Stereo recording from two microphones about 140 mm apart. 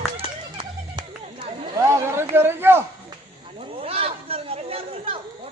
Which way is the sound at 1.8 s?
20° right (ahead or behind).